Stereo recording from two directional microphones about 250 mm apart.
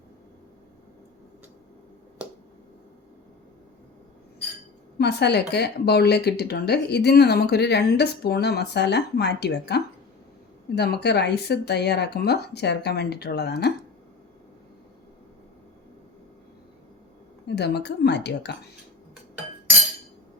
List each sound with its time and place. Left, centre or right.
4.9 s speech: left
17.4 s speech: left